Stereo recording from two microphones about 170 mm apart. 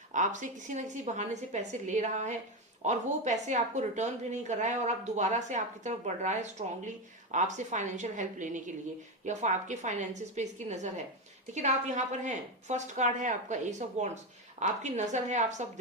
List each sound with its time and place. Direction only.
0.1 s a woman's voice: 45° right (ahead or behind)